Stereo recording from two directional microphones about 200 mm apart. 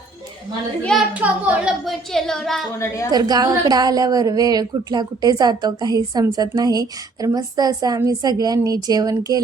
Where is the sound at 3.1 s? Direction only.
20° right (ahead or behind).